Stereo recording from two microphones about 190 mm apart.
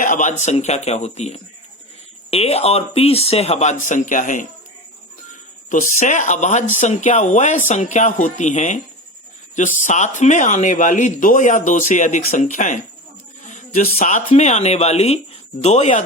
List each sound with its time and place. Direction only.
0.0 s speech: 45° left (ahead or behind)
5.6 s speech: 40° left (ahead or behind)